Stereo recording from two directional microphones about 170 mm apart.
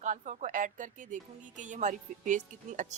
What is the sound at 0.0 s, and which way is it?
Speech, 45° right (ahead or behind).